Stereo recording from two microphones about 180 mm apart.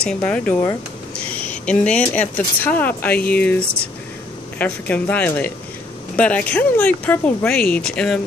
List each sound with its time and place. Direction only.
0.0 s speech: 5° left (ahead or behind)